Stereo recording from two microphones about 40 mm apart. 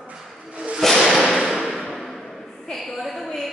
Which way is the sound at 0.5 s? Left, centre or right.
Right.